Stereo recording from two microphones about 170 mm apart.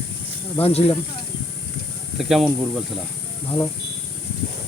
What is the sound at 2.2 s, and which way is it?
Snake, centre (ahead or behind).